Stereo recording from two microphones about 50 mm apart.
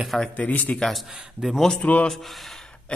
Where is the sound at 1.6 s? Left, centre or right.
Centre.